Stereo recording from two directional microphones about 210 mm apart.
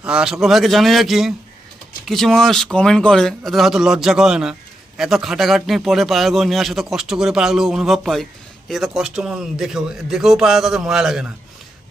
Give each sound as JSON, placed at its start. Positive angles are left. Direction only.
{"t": 0.0, "sound": "a man's voice", "side_deg": -5}